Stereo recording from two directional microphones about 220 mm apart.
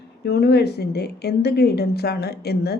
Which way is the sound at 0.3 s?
50° left (ahead or behind).